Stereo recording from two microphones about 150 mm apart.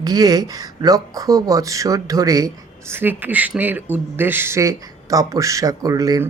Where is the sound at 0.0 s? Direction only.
25° right (ahead or behind).